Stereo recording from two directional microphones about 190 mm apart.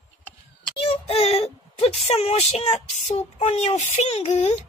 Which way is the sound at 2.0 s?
35° left (ahead or behind).